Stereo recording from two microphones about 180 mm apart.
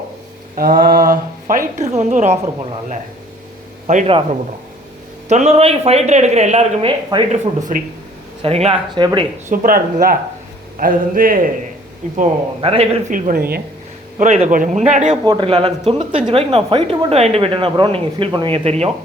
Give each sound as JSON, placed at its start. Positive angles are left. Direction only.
{"t": 0.5, "sound": "a woman's voice", "side_deg": -55}
{"t": 3.8, "sound": "a woman's voice", "side_deg": -45}
{"t": 5.3, "sound": "a woman's voice", "side_deg": -35}
{"t": 7.1, "sound": "speech", "side_deg": -20}
{"t": 7.7, "sound": "a woman's voice", "side_deg": -45}
{"t": 8.4, "sound": "a woman's voice", "side_deg": -35}
{"t": 9.5, "sound": "a woman's voice", "side_deg": -50}
{"t": 12.1, "sound": "a woman's voice", "side_deg": -35}
{"t": 14.2, "sound": "a woman's voice", "side_deg": -40}
{"t": 15.2, "sound": "a woman's voice", "side_deg": -25}